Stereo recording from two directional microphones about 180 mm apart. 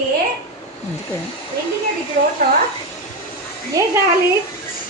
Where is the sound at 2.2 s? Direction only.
45° right (ahead or behind).